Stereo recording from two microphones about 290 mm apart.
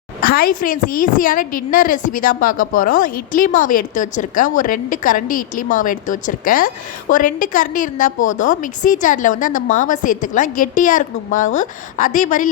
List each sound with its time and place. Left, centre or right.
0.2 s speech: left